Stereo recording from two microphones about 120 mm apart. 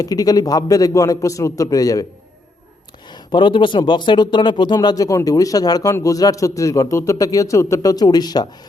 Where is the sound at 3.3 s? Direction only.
40° left (ahead or behind).